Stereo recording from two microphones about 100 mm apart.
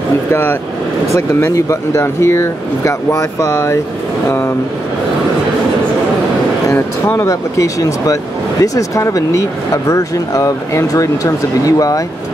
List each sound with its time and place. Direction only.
0.3 s speech: 20° left (ahead or behind)
6.7 s speech: 25° left (ahead or behind)